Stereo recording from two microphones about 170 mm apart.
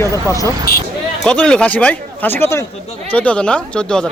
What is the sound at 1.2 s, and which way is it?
Speech, 5° left (ahead or behind).